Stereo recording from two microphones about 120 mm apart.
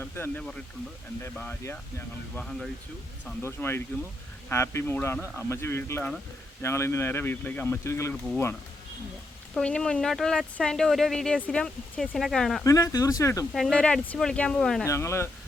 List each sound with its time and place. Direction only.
0.0 s speech: 15° left (ahead or behind)
1.7 s speech: 15° left (ahead or behind)
2.4 s speech: 5° left (ahead or behind)
3.4 s speech: 20° left (ahead or behind)
9.6 s speech: 5° left (ahead or behind)
12.6 s speech: 30° left (ahead or behind)
13.5 s speech: 5° left (ahead or behind)
14.8 s speech: 25° left (ahead or behind)